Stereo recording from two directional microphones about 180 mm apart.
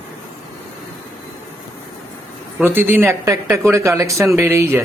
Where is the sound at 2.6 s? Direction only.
10° right (ahead or behind).